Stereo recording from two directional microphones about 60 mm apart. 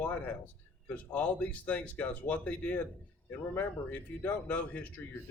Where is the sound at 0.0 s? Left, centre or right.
Left.